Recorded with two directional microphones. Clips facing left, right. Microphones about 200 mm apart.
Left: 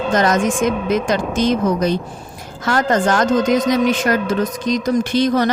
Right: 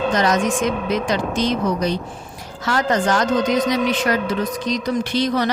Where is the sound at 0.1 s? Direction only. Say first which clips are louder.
Left 6 dB; 50° left (ahead or behind).